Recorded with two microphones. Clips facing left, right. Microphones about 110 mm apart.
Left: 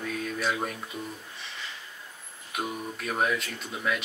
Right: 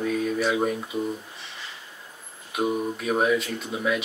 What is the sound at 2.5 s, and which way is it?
Speech, centre (ahead or behind).